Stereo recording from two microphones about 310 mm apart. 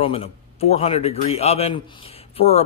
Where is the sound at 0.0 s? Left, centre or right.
Centre.